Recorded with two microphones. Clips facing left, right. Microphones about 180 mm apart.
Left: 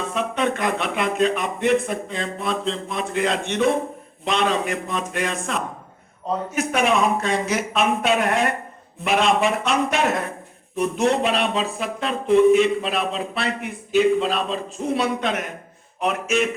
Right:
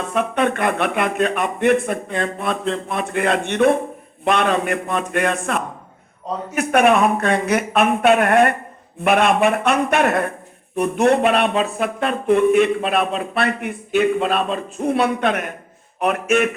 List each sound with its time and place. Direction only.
0.1 s speech: 60° right (ahead or behind)